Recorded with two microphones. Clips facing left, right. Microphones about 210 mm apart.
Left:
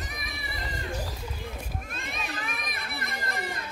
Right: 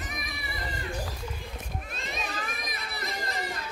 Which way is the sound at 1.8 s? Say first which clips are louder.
Right 1 dB; 55° left (ahead or behind).